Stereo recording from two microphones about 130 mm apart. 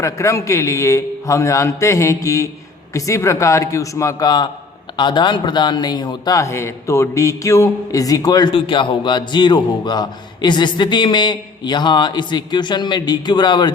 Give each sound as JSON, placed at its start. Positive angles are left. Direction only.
{"t": 0.0, "sound": "a man's voice", "side_deg": 25}